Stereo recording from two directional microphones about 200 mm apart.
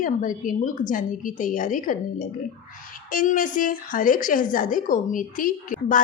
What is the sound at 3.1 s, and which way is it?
A woman's voice, 40° left (ahead or behind).